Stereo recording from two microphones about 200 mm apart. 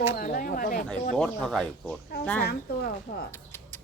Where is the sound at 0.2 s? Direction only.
45° left (ahead or behind).